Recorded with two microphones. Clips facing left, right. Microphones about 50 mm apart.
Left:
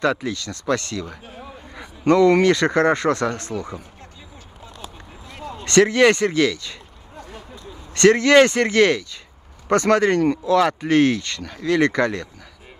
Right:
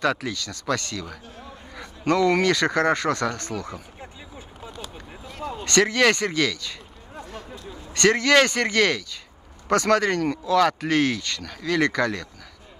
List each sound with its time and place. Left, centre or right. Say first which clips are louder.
0.0 s speech: left 3 dB; left
1.3 s a sound: left 3 dB; centre
2.1 s speech: left 5 dB; left
3.5 s speech: left 3 dB; centre
5.4 s a sound: right 2 dB; centre
5.7 s speech: left 5 dB; left
7.9 s speech: left 5 dB; left